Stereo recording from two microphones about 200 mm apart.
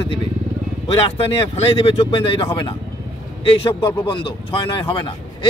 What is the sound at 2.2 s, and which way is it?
A man's voice, 25° left (ahead or behind).